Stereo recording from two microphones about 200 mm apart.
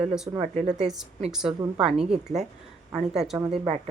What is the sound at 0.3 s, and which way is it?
Speech, 15° right (ahead or behind).